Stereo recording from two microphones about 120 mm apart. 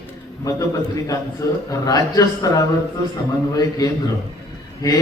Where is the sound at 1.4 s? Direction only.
25° left (ahead or behind).